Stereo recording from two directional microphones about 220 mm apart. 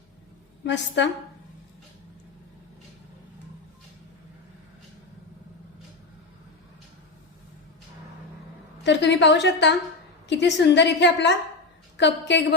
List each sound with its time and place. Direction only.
0.6 s a woman's voice: 55° left (ahead or behind)
8.8 s a woman's voice: 55° left (ahead or behind)